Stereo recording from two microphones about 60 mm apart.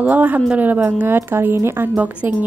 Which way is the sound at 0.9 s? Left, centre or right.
Right.